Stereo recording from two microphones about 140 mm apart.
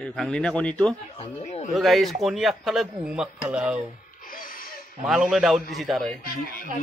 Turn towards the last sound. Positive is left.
turn(degrees=90)